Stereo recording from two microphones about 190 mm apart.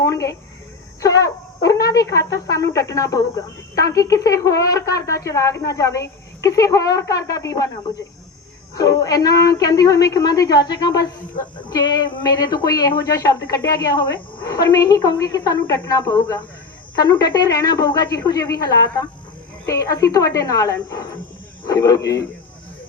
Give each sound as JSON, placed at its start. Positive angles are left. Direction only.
{"t": 0.1, "sound": "a sound", "side_deg": 15}
{"t": 1.0, "sound": "speech", "side_deg": 20}
{"t": 8.7, "sound": "a woman's voice", "side_deg": 20}